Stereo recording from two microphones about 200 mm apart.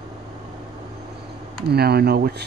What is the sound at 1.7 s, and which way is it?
Speech, 50° right (ahead or behind).